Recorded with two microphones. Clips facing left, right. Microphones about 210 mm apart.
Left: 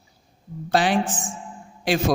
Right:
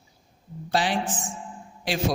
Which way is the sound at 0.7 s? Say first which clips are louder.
Left 5 dB; 50° left (ahead or behind).